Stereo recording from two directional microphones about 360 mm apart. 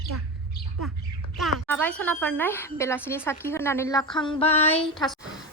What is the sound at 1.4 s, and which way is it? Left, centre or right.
A woman's voice, centre.